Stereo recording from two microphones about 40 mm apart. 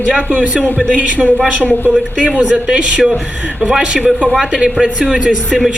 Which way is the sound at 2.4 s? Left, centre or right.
Right.